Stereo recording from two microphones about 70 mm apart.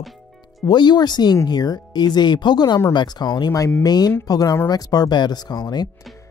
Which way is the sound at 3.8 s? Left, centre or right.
Left.